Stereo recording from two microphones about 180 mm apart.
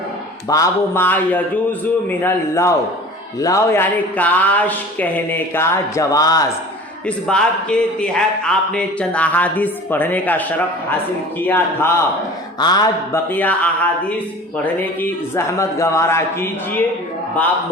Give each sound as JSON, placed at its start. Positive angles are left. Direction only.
{"t": 0.4, "sound": "a man's voice", "side_deg": 20}
{"t": 7.3, "sound": "a man's voice", "side_deg": 5}
{"t": 12.5, "sound": "a man's voice", "side_deg": 20}
{"t": 13.3, "sound": "a man's voice", "side_deg": 10}